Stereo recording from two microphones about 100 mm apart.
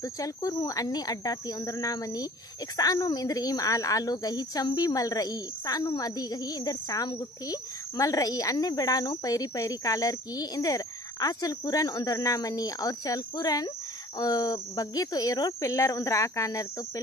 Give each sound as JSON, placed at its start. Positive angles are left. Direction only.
{"t": 0.0, "sound": "a woman's voice", "side_deg": 35}